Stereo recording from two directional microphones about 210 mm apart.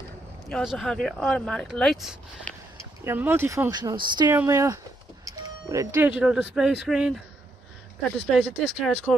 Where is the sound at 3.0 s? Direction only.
10° right (ahead or behind).